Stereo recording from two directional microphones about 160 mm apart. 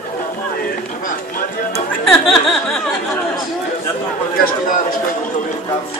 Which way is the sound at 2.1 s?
Centre (ahead or behind).